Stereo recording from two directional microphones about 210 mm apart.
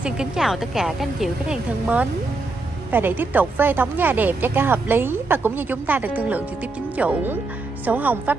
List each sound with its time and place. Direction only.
0.0 s a woman's voice: 5° right (ahead or behind)